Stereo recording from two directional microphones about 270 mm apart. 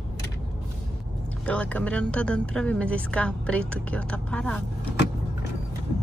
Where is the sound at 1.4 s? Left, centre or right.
Centre.